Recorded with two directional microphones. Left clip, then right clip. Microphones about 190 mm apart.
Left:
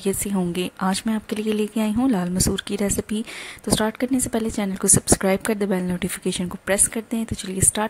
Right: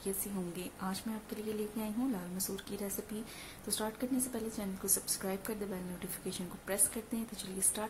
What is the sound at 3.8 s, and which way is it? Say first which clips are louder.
A woman's voice: left 12 dB; 35° left (ahead or behind).